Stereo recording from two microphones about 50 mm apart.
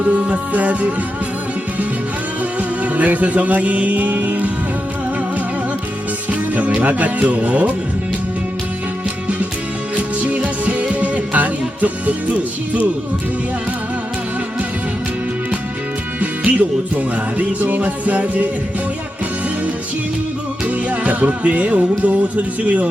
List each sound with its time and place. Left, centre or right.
0.0 s music: right
2.6 s music: right
6.7 s music: right
9.9 s music: right
16.2 s music: right
20.7 s music: right